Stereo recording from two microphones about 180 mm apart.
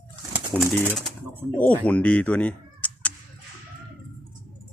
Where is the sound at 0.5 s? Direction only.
Centre (ahead or behind).